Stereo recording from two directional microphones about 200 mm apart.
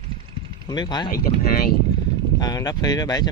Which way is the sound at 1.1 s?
45° left (ahead or behind).